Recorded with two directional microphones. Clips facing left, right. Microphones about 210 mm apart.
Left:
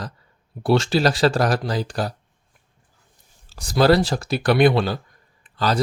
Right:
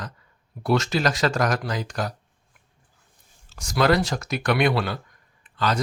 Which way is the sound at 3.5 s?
35° left (ahead or behind).